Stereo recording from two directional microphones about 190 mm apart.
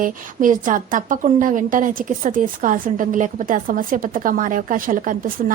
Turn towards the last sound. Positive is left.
turn(degrees=-45)  # may be behind; listen again after turning